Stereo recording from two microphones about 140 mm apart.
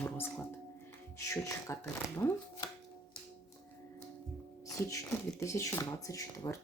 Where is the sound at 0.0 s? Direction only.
10° left (ahead or behind).